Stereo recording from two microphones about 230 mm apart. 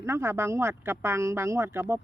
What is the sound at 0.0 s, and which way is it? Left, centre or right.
Speech, centre.